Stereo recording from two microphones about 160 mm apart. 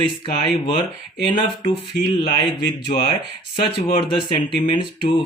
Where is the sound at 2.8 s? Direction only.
35° left (ahead or behind).